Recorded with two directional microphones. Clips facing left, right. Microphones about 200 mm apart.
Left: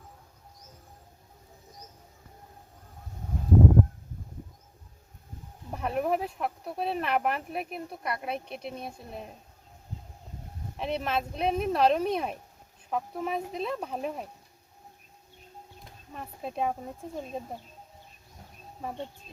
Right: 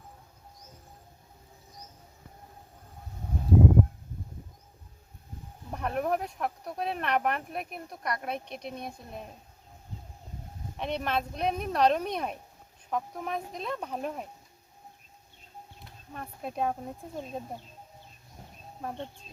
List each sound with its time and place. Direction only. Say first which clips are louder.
5.7 s speech: left 1 dB; 5° left (ahead or behind)
10.8 s speech: left 1 dB; 5° left (ahead or behind)
15.8 s speech: even; centre (ahead or behind)
18.8 s speech: left 1 dB; 5° left (ahead or behind)